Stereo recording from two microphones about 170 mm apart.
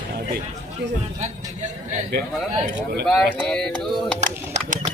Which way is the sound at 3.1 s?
5° left (ahead or behind).